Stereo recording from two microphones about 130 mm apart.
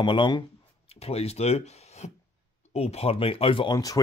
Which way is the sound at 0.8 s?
50° left (ahead or behind).